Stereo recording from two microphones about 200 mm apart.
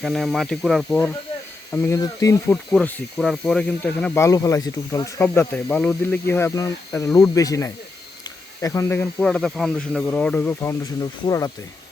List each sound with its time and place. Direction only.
0.0 s speech: centre (ahead or behind); by 2.6 s 15° left (ahead or behind)
2.7 s speech: centre (ahead or behind)